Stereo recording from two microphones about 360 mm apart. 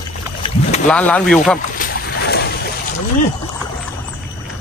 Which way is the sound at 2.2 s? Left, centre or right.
Left.